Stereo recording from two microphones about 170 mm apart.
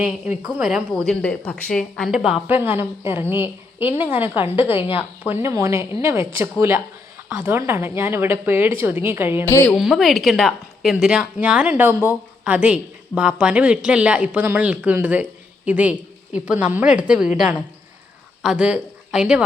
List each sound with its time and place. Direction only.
0.5 s a woman's voice: 5° right (ahead or behind)
9.5 s a woman's voice: 15° left (ahead or behind)
9.7 s a woman's voice: centre (ahead or behind)